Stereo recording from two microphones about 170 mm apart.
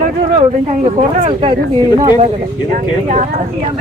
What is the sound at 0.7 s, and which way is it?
Speech, 40° right (ahead or behind).